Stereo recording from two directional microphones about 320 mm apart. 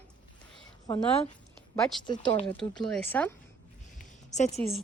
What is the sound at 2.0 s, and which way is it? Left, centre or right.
Speech, centre.